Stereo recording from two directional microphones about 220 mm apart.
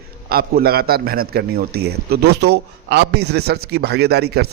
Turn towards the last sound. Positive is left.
turn(degrees=-45)  # may be behind; listen again after turning